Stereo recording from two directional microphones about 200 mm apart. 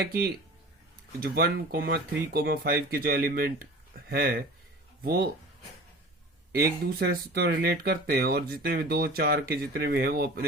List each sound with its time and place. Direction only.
0.0 s speech: 55° right (ahead or behind)
6.6 s speech: 50° right (ahead or behind)